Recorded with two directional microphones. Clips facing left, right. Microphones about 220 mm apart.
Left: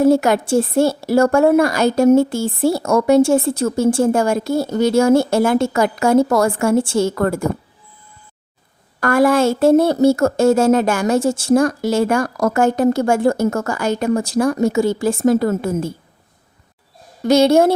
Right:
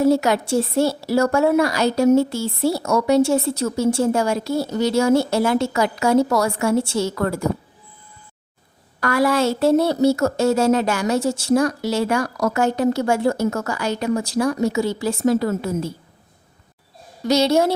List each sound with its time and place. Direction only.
0.0 s a woman's voice: 50° left (ahead or behind)
9.0 s a woman's voice: 50° left (ahead or behind)
17.2 s a woman's voice: 50° left (ahead or behind)